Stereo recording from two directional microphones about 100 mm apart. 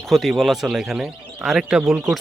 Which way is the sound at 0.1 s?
Centre (ahead or behind).